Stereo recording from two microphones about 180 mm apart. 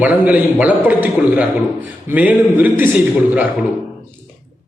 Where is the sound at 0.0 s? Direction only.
10° right (ahead or behind).